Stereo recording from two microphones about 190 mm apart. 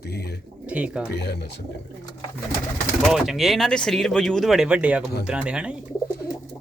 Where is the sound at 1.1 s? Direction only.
60° left (ahead or behind).